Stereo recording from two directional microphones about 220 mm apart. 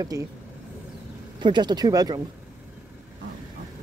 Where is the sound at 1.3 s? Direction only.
20° right (ahead or behind).